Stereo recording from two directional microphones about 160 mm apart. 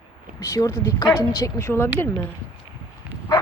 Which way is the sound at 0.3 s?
20° left (ahead or behind).